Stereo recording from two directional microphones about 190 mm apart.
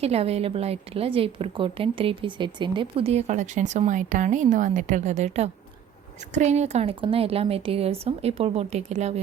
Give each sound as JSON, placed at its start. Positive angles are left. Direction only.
{"t": 0.0, "sound": "a woman's voice", "side_deg": -30}